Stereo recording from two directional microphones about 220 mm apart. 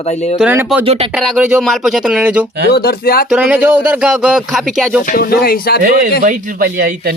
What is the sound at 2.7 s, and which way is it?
Speech, 45° left (ahead or behind).